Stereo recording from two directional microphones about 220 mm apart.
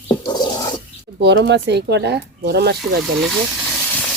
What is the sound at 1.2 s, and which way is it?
Speech, 50° right (ahead or behind).